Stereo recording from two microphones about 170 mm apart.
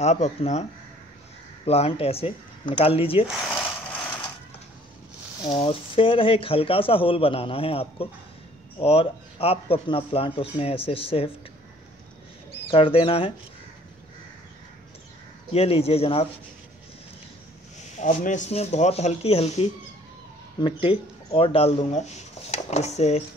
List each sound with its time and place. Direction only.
0.0 s speech: 40° left (ahead or behind)
1.7 s speech: 35° left (ahead or behind)
3.3 s speech: centre (ahead or behind)
5.4 s speech: 30° left (ahead or behind)
12.7 s speech: 35° left (ahead or behind)
15.5 s speech: 35° left (ahead or behind)
17.9 s speech: 45° left (ahead or behind)
21.3 s speech: 35° left (ahead or behind)